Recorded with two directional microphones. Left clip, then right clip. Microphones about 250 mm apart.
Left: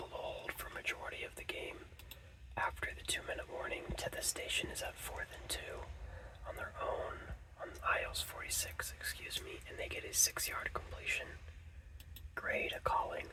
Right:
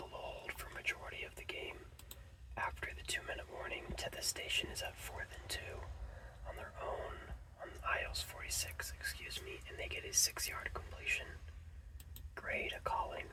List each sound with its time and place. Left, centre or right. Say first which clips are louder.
0.1 s whispering: left 3 dB; left
7.9 s speech: left 3 dB; left
12.3 s speech: left 3 dB; left